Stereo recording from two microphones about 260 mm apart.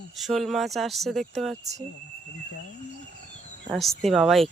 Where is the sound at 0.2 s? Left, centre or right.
Centre.